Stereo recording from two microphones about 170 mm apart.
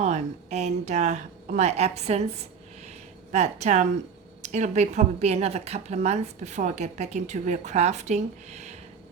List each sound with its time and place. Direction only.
0.0 s a woman's voice: 40° right (ahead or behind)